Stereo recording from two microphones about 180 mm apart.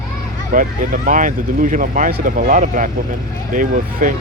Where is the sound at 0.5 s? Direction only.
45° right (ahead or behind).